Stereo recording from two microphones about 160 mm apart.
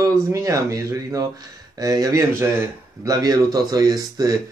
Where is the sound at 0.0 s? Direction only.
20° right (ahead or behind).